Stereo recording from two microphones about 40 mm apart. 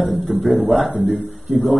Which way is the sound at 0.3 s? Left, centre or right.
Centre.